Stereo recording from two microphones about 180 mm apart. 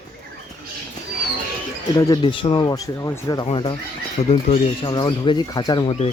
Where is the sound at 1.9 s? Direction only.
25° left (ahead or behind).